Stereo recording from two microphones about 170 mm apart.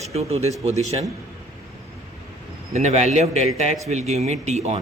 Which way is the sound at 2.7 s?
40° right (ahead or behind).